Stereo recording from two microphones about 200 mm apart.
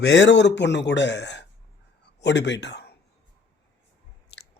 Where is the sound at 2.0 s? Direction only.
60° left (ahead or behind).